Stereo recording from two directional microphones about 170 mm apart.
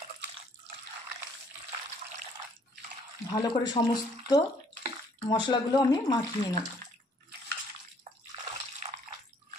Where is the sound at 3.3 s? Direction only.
25° left (ahead or behind).